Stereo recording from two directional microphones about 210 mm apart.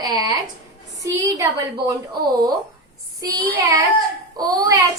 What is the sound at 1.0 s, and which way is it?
Speech, 15° right (ahead or behind).